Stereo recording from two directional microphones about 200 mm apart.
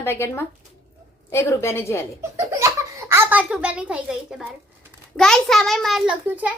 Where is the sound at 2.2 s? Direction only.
15° right (ahead or behind).